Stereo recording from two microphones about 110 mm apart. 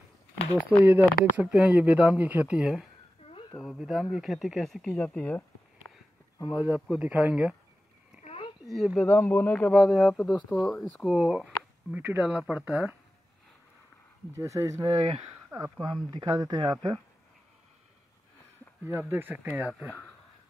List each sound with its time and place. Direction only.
0.6 s speech: 15° right (ahead or behind); by 5.4 s 10° left (ahead or behind)
6.3 s speech: 35° left (ahead or behind)
6.9 s speech: 15° right (ahead or behind)
8.7 s speech: centre (ahead or behind)
9.0 s speech: 15° left (ahead or behind)
9.8 s speech: centre (ahead or behind)
11.1 s speech: 10° right (ahead or behind)
14.3 s speech: 30° right (ahead or behind)
15.8 s speech: 45° right (ahead or behind)
18.9 s speech: 20° right (ahead or behind)